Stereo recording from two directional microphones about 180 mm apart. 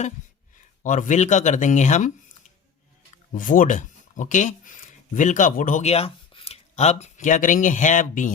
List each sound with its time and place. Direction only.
0.8 s speech: 45° left (ahead or behind)
3.3 s speech: 50° left (ahead or behind)